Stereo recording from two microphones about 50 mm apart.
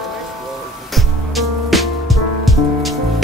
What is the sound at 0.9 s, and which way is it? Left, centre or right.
Music, centre.